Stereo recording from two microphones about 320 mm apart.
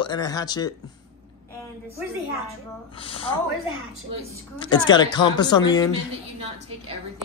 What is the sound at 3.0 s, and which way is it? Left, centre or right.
Speech, centre.